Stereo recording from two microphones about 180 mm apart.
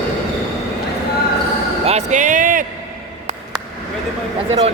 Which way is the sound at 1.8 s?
40° right (ahead or behind).